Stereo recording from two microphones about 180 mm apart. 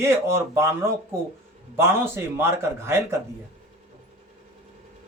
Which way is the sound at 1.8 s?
15° right (ahead or behind).